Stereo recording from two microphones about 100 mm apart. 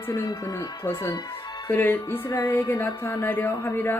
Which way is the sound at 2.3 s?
35° left (ahead or behind).